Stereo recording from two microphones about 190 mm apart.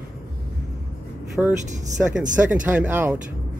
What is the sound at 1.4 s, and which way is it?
Speech, centre (ahead or behind).